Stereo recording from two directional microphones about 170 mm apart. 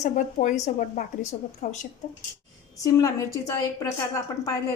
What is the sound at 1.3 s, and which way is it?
Speech, 30° left (ahead or behind).